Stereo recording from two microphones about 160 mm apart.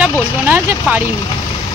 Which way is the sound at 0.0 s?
10° right (ahead or behind).